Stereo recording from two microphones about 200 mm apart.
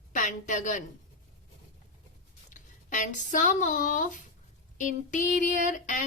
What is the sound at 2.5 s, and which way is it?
Speech, 40° left (ahead or behind).